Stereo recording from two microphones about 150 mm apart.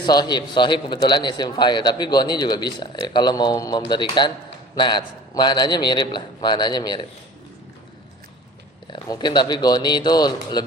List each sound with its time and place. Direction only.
0.0 s a man's voice: 30° left (ahead or behind)
8.9 s a man's voice: 30° left (ahead or behind)